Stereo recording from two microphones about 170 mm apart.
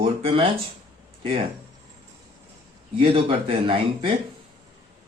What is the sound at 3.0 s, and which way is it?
Speech, 35° right (ahead or behind).